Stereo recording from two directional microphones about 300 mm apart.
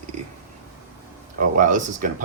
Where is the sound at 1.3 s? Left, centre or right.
Right.